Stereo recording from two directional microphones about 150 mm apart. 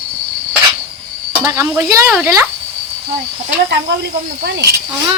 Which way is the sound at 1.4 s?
20° right (ahead or behind).